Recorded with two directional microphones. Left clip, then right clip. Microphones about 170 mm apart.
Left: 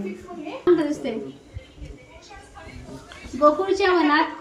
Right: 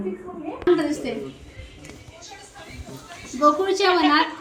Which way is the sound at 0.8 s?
10° left (ahead or behind).